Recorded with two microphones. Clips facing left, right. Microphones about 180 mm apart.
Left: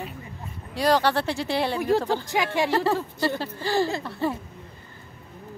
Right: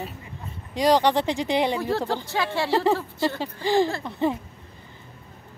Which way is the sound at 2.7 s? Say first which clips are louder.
Right 2 dB; 15° right (ahead or behind).